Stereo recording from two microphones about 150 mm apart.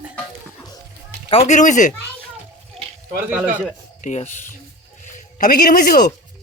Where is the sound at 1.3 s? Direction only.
40° left (ahead or behind).